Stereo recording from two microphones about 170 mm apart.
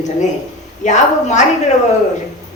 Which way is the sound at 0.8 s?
45° left (ahead or behind).